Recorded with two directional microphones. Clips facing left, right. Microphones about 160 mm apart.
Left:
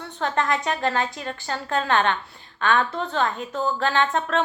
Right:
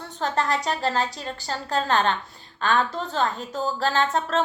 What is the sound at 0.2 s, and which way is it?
A woman's voice, 40° right (ahead or behind).